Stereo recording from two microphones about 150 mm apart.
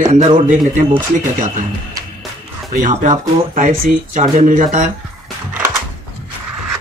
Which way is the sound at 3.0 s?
60° right (ahead or behind).